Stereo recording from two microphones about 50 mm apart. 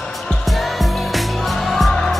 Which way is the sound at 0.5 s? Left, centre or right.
Centre.